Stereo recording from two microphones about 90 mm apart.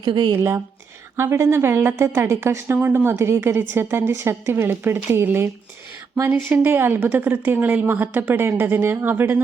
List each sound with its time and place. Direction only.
0.0 s speech: 55° right (ahead or behind)
0.3 s a woman's voice: 25° right (ahead or behind)